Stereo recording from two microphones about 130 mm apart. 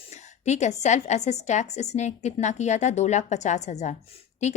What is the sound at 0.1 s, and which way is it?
Speech, 60° left (ahead or behind).